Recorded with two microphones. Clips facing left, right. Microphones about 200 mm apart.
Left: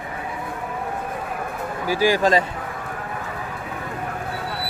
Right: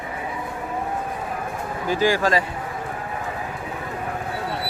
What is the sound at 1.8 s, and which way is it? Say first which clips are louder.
Speech: left 1 dB; 10° left (ahead or behind).